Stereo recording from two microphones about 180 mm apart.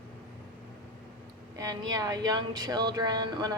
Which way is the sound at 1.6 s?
20° right (ahead or behind).